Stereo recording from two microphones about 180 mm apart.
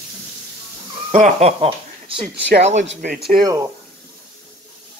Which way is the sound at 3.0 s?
60° right (ahead or behind).